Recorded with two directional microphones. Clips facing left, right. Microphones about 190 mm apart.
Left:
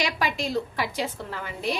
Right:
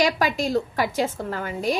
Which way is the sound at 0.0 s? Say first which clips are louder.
Right 6 dB; 45° right (ahead or behind).